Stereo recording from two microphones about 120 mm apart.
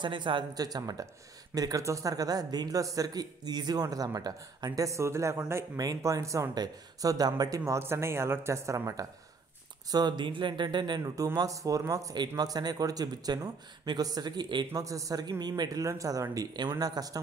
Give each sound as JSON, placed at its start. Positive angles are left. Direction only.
{"t": 0.0, "sound": "speech", "side_deg": -45}